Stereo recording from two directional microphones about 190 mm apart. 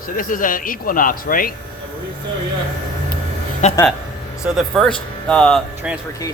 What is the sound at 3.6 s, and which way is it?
Speech, 40° left (ahead or behind).